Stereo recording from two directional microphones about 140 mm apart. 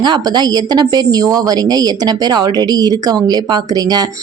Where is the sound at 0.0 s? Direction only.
30° right (ahead or behind).